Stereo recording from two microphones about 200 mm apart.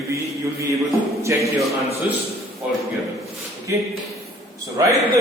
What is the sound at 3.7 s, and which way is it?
Speech, 15° right (ahead or behind).